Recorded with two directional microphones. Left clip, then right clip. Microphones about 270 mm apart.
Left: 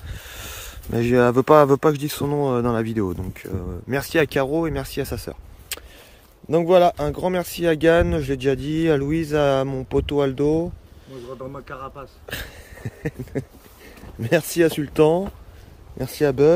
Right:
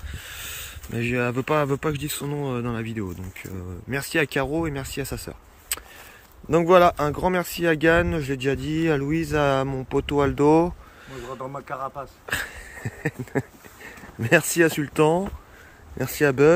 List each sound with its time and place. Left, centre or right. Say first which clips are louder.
0.1 s speech: even; centre